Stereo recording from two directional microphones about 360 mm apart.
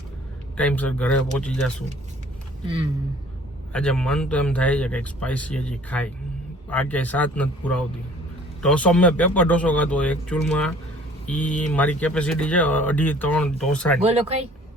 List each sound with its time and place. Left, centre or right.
0.5 s speech: centre
3.7 s speech: centre
14.0 s speech: centre